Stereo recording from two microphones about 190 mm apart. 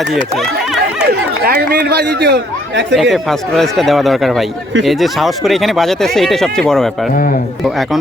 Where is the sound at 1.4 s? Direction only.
55° right (ahead or behind).